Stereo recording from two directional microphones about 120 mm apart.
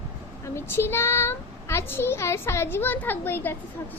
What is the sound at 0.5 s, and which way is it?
A child's voice, 20° left (ahead or behind).